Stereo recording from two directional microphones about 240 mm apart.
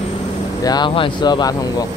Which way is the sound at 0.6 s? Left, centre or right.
Centre.